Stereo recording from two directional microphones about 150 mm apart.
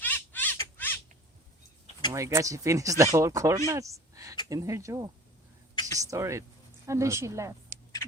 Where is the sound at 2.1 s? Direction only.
20° right (ahead or behind).